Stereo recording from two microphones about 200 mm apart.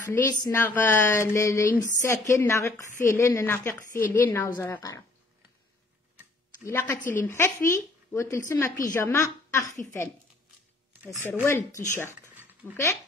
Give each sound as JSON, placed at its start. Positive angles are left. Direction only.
{"t": 0.1, "sound": "speech", "side_deg": 15}
{"t": 6.6, "sound": "a woman's voice", "side_deg": 10}
{"t": 11.4, "sound": "speech", "side_deg": 15}
{"t": 12.2, "sound": "a sound", "side_deg": -10}